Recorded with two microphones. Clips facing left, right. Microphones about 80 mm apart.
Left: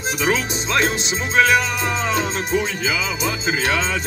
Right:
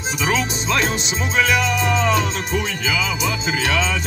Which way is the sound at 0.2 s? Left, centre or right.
Left.